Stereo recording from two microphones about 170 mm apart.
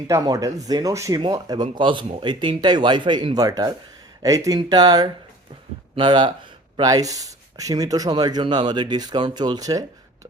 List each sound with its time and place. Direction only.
0.1 s speech: 20° right (ahead or behind)